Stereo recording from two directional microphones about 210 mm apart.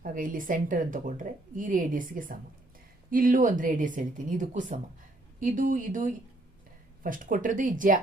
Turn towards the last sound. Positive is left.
turn(degrees=-40)  # may be behind; listen again after turning